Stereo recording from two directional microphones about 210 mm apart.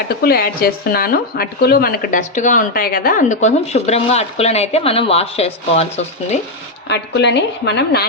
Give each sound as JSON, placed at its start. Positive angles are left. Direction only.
{"t": 0.2, "sound": "speech", "side_deg": 45}
{"t": 6.8, "sound": "a woman's voice", "side_deg": 55}